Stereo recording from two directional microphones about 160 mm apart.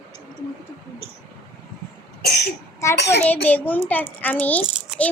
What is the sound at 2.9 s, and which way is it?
Speech, 90° left.